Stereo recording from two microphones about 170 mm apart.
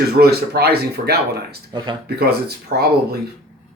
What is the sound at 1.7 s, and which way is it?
Speech, 25° right (ahead or behind).